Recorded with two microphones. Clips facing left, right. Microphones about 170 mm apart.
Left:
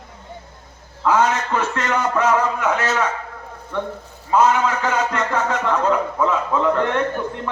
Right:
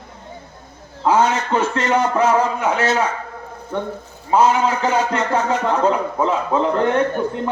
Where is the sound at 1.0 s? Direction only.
30° right (ahead or behind).